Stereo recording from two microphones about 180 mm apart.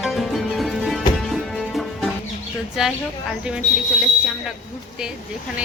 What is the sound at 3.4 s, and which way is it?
Speech, 5° right (ahead or behind).